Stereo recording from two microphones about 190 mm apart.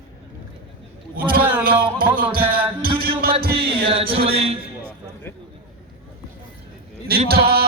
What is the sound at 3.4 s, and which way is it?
Music, 55° right (ahead or behind).